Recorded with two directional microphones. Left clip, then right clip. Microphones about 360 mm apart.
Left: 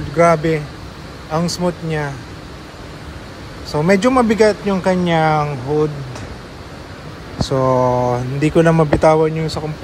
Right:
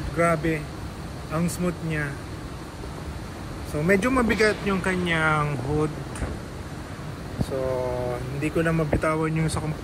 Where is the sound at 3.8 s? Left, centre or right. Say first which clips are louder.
Left 8 dB; centre.